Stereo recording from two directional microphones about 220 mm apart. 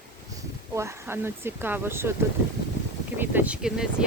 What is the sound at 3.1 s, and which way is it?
Speech, 10° right (ahead or behind).